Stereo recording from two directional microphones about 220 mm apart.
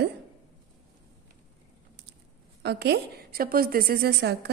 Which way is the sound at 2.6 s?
50° right (ahead or behind).